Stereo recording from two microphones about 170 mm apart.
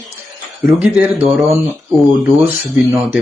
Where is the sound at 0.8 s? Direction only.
10° right (ahead or behind).